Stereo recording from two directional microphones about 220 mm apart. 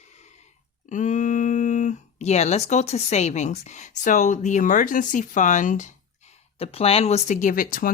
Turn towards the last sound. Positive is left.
turn(degrees=40)  # may be behind; listen again after turning